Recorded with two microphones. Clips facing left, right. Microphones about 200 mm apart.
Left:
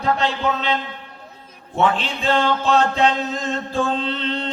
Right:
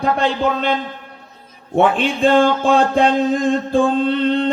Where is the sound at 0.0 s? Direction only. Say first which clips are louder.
Right 3 dB; 55° right (ahead or behind).